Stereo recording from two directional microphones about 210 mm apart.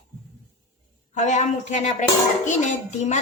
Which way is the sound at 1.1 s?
35° left (ahead or behind).